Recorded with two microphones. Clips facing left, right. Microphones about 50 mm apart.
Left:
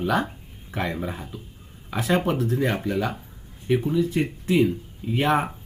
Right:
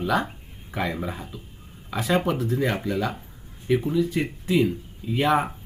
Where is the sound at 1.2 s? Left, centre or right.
Centre.